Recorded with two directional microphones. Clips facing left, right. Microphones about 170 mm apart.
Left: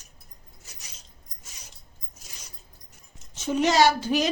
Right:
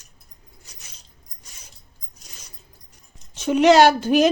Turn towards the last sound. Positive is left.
turn(degrees=-55)  # may be behind; listen again after turning